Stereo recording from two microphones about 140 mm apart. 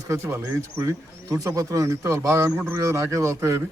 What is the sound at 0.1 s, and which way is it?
Speech, 15° right (ahead or behind).